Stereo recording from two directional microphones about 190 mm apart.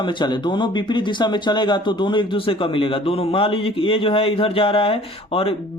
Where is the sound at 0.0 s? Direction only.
25° left (ahead or behind).